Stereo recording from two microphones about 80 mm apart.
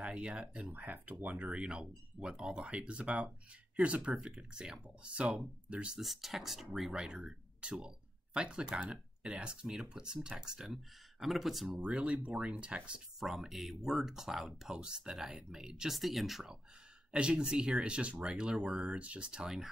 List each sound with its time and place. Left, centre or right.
0.0 s speech: centre
11.9 s speech: centre
13.2 s speech: centre